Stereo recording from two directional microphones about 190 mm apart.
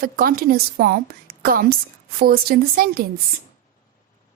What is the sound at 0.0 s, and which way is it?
A woman's voice, 50° right (ahead or behind).